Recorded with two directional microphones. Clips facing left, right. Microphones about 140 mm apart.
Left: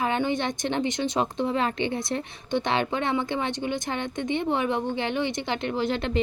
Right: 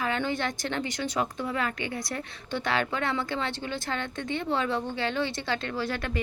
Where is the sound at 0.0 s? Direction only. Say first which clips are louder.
Left 3 dB; 20° left (ahead or behind).